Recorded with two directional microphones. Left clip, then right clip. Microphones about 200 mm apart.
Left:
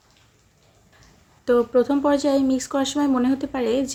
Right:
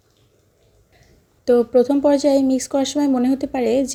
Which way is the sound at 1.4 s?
20° right (ahead or behind).